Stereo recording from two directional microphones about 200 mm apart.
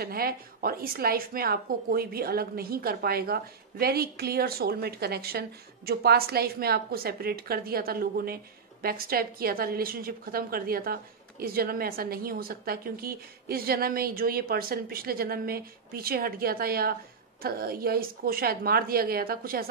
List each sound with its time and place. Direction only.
0.0 s a woman's voice: 50° right (ahead or behind)